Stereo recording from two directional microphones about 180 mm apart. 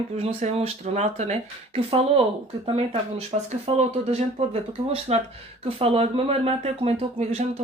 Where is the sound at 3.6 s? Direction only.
35° right (ahead or behind).